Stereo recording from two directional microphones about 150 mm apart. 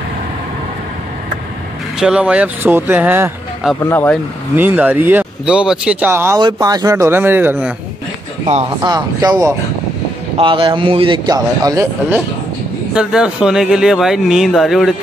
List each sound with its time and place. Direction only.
2.0 s speech: 5° right (ahead or behind)
3.8 s speech: 15° left (ahead or behind)
4.6 s speech: 10° right (ahead or behind)
8.8 s speech: 25° right (ahead or behind)
10.3 s a man's voice: 35° right (ahead or behind)
12.9 s speech: 5° right (ahead or behind)